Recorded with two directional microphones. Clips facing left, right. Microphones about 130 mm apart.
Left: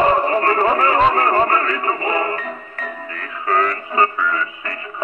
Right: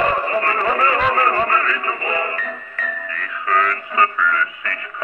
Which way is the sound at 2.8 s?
30° left (ahead or behind).